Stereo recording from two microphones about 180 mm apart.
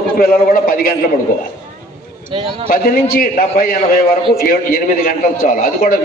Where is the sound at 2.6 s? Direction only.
55° left (ahead or behind).